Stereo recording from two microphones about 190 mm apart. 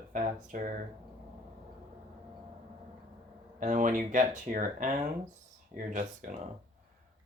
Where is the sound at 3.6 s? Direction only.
45° right (ahead or behind).